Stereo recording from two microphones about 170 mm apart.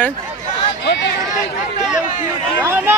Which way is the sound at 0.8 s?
90° left.